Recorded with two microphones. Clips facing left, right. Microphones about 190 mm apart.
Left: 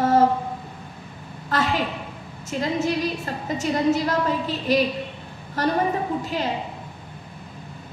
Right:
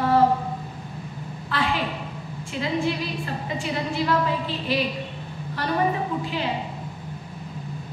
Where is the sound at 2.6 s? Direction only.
45° left (ahead or behind).